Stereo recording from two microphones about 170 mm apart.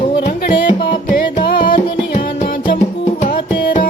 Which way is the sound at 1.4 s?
60° left (ahead or behind).